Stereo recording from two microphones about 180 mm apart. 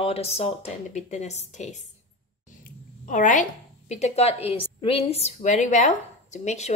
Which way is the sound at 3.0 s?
45° left (ahead or behind).